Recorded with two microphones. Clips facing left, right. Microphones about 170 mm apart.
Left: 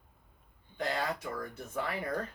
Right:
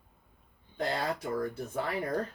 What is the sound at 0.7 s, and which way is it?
Speech, 35° right (ahead or behind).